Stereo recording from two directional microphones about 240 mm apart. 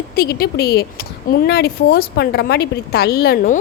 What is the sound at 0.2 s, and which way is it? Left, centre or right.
A woman's voice, left.